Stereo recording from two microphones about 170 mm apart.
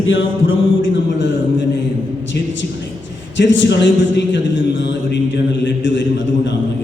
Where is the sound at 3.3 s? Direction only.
90° left.